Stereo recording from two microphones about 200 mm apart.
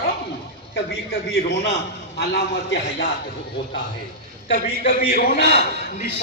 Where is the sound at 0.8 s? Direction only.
55° left (ahead or behind).